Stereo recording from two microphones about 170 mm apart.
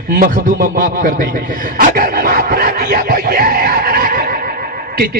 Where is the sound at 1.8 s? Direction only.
60° right (ahead or behind).